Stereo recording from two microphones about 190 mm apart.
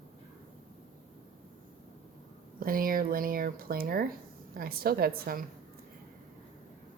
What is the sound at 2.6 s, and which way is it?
Speech, 50° right (ahead or behind).